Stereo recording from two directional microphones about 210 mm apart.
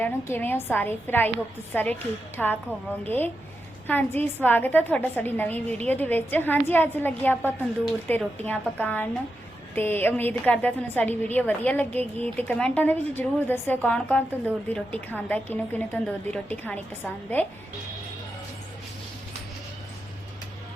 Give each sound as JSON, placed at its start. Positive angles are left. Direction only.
{"t": 0.0, "sound": "a woman's voice", "side_deg": 10}